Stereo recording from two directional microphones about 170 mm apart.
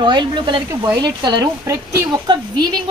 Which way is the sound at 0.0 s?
25° right (ahead or behind).